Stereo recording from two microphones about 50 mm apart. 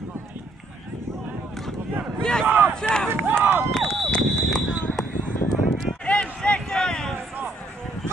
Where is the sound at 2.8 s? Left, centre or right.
Centre.